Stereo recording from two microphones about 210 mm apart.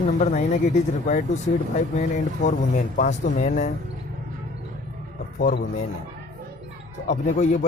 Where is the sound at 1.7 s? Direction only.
35° left (ahead or behind).